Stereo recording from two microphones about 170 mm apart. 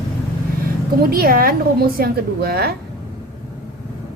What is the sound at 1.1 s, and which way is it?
A woman's voice, 60° right (ahead or behind).